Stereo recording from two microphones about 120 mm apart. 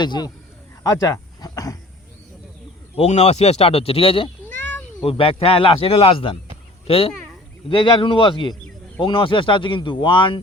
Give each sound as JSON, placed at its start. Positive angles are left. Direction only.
{"t": 0.0, "sound": "a man's voice", "side_deg": 40}
{"t": 0.8, "sound": "a sound", "side_deg": 30}
{"t": 2.9, "sound": "speech", "side_deg": 60}
{"t": 4.4, "sound": "cat", "side_deg": 15}
{"t": 5.0, "sound": "speech", "side_deg": 50}